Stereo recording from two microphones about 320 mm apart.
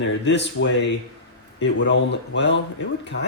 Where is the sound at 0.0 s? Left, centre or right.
Left.